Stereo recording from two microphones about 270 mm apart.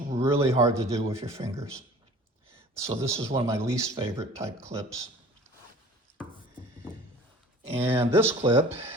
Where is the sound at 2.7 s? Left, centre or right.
Centre.